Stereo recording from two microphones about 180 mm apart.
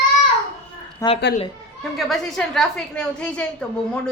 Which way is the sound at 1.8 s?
Centre (ahead or behind).